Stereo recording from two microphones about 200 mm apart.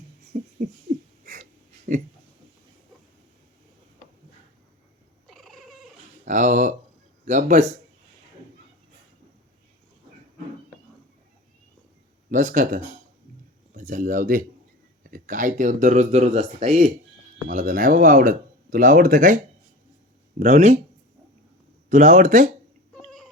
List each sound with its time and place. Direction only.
0.3 s a sound: 40° right (ahead or behind)
1.9 s speech: 45° right (ahead or behind)
5.3 s cat: centre (ahead or behind)
6.2 s speech: 40° right (ahead or behind)
12.3 s speech: 40° right (ahead or behind)
20.4 s speech: 35° right (ahead or behind)
21.8 s speech: 35° right (ahead or behind)
23.0 s a sound: centre (ahead or behind)